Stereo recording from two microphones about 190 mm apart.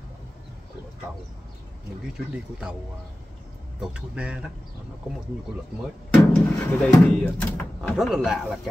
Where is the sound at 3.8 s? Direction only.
5° right (ahead or behind).